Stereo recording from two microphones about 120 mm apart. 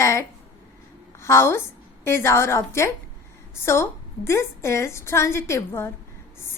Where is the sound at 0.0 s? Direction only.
25° left (ahead or behind).